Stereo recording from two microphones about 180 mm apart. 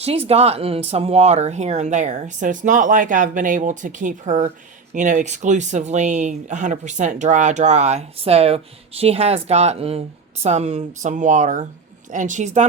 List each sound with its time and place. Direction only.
0.0 s speech: 35° right (ahead or behind)